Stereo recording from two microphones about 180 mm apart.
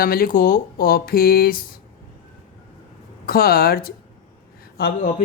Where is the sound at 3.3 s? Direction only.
60° left (ahead or behind).